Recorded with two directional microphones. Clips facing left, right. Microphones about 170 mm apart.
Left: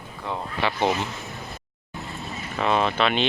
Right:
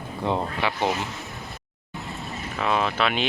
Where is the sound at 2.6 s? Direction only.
5° right (ahead or behind).